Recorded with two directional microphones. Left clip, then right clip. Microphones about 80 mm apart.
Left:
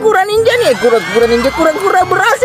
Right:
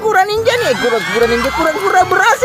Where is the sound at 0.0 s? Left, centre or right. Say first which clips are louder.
Left 2 dB; left.